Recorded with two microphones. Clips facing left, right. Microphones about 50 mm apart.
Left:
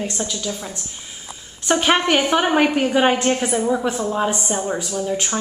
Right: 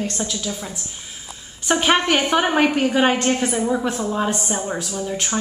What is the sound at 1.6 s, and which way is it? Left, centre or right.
A woman's voice, centre.